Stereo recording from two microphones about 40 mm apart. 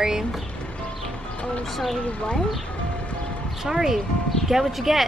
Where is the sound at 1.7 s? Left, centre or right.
Centre.